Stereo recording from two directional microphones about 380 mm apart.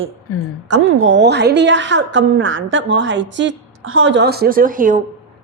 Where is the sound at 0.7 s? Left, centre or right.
Right.